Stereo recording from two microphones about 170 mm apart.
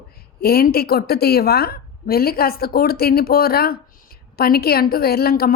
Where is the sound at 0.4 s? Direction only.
65° left (ahead or behind).